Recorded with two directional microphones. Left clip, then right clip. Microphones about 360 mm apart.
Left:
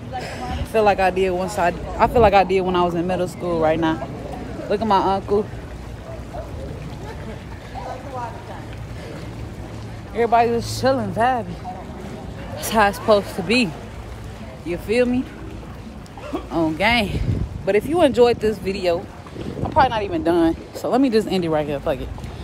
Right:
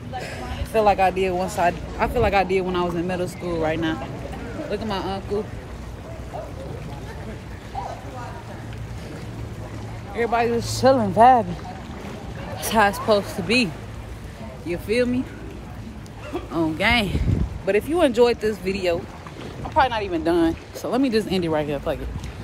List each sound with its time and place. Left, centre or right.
0.2 s speech: centre
10.1 s speech: centre
12.5 s speech: centre
14.7 s speech: centre
16.5 s speech: centre